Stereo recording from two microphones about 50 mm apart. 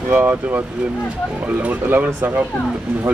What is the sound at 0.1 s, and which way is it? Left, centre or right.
Speech, right.